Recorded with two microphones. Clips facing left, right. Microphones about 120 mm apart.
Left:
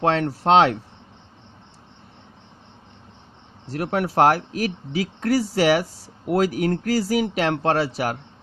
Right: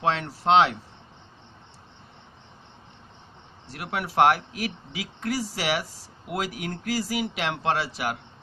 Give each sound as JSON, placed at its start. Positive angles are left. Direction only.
{"t": 0.0, "sound": "speech", "side_deg": 50}
{"t": 3.7, "sound": "speech", "side_deg": 45}